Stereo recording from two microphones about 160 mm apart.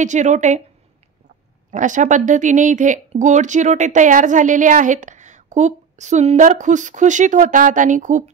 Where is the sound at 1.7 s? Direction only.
50° right (ahead or behind).